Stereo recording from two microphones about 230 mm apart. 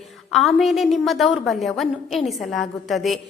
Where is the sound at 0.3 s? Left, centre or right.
Centre.